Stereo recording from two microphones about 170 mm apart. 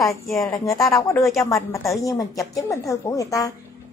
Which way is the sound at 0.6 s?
20° left (ahead or behind).